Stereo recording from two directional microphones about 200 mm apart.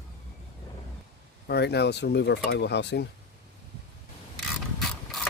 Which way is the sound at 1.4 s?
55° left (ahead or behind).